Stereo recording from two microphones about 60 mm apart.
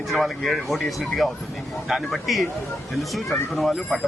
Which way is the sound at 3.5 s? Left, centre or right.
Centre.